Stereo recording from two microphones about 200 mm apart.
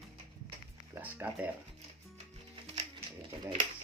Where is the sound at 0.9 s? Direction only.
10° right (ahead or behind).